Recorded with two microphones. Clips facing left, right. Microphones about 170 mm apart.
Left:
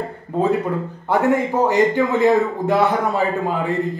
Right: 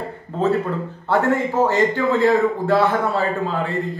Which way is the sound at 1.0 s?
15° left (ahead or behind).